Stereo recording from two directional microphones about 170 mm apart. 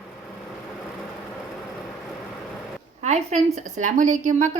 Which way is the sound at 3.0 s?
40° right (ahead or behind).